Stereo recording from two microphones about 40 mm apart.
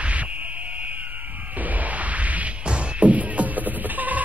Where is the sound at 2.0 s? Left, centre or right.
Right.